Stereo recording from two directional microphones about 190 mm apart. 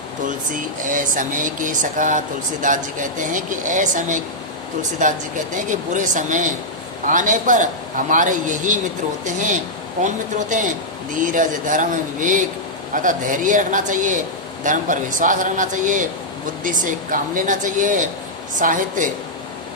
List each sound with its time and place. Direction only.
0.9 s speech: 45° right (ahead or behind)